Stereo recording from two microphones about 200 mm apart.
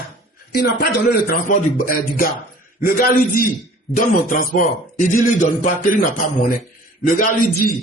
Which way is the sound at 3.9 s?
45° left (ahead or behind).